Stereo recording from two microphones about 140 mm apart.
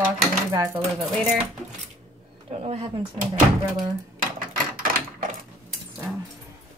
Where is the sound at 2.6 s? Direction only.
40° right (ahead or behind).